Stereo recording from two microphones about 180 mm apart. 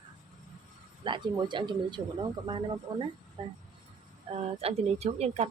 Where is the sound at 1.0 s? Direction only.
25° right (ahead or behind).